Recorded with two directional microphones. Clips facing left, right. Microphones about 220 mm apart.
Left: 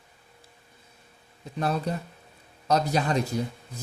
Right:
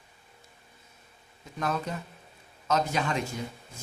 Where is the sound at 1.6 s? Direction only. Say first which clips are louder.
Left 4 dB; 35° left (ahead or behind).